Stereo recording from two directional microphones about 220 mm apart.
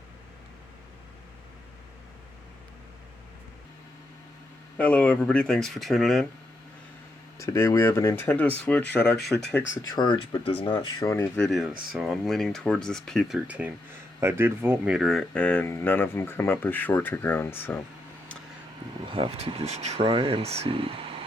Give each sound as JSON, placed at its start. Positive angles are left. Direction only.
{"t": 4.8, "sound": "speech", "side_deg": 5}
{"t": 7.3, "sound": "speech", "side_deg": 15}
{"t": 9.1, "sound": "speech", "side_deg": 50}
{"t": 9.9, "sound": "speech", "side_deg": 20}
{"t": 19.0, "sound": "speech", "side_deg": -25}